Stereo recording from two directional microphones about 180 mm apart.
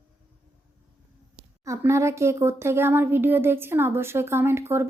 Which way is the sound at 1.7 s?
15° right (ahead or behind).